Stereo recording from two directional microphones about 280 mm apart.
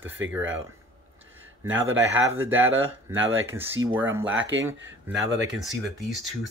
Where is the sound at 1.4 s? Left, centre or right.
Centre.